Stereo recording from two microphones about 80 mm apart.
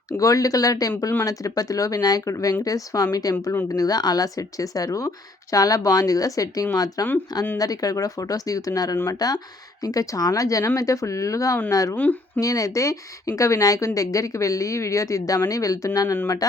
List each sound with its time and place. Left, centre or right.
0.1 s speech: left